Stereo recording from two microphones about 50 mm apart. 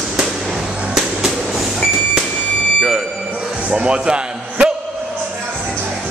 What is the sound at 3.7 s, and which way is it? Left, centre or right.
Music, centre.